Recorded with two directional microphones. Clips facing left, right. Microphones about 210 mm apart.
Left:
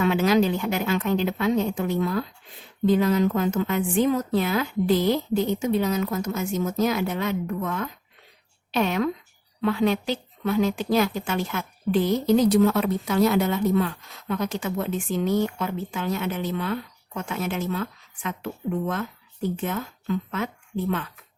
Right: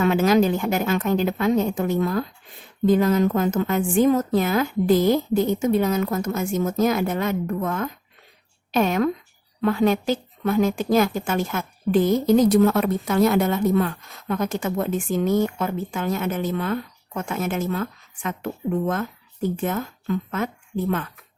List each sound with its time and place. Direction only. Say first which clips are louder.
0.0 s a woman's voice: right 2 dB; 45° right (ahead or behind)